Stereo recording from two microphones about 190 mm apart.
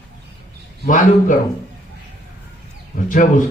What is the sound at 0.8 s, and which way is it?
Speech, 45° left (ahead or behind).